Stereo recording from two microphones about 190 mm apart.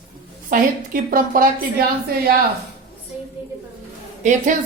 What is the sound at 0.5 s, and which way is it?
Speech, 45° right (ahead or behind).